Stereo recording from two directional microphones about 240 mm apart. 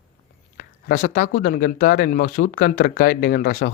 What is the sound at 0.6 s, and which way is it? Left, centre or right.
Speech, left.